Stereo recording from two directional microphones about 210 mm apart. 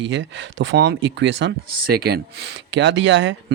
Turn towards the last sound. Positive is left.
turn(degrees=-65)  # may be behind; listen again after turning